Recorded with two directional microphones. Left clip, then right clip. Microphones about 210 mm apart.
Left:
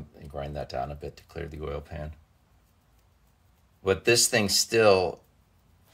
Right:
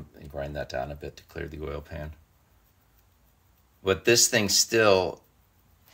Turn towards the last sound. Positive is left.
turn(degrees=-10)  # may be behind; listen again after turning